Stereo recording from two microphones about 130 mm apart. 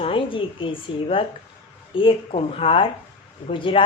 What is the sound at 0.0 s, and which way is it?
Speech, 40° left (ahead or behind).